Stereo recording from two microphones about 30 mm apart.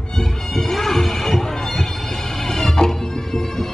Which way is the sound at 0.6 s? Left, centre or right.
Centre.